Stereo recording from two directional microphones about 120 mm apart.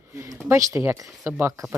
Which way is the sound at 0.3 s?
25° right (ahead or behind).